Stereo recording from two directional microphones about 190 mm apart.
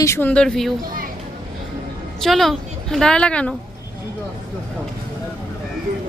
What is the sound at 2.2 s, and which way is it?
A woman's voice, centre (ahead or behind).